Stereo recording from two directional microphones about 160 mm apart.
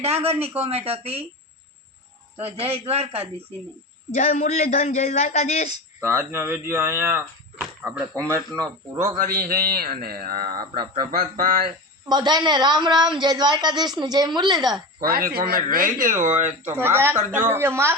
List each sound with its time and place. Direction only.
0.0 s speech: 40° right (ahead or behind)
2.3 s speech: 40° right (ahead or behind)
4.1 s speech: 45° left (ahead or behind)
6.0 s a woman's voice: 15° right (ahead or behind)
9.0 s a man's voice: 60° right (ahead or behind)
12.0 s a woman's voice: 25° right (ahead or behind)
15.0 s a man's voice: 75° right (ahead or behind)
16.2 s speech: 45° right (ahead or behind)
16.8 s speech: 15° right (ahead or behind)